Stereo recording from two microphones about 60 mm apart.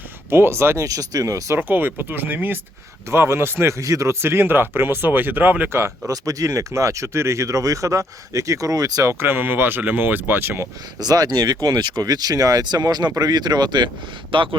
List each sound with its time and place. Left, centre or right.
0.3 s speech: right
0.8 s speech: right
1.5 s speech: right
3.1 s speech: right
3.7 s speech: right
6.1 s speech: right
9.0 s speech: right
11.1 s speech: right